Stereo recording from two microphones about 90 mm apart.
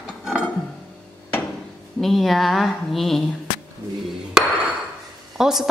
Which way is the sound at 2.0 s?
Centre (ahead or behind).